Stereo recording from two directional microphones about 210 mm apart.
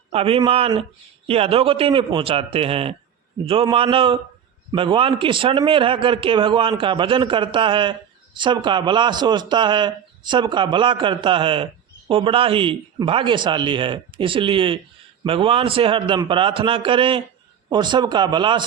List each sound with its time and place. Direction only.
0.1 s a man's voice: 25° right (ahead or behind)